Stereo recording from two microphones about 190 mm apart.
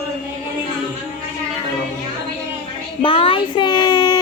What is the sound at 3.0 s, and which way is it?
Speech, 30° left (ahead or behind).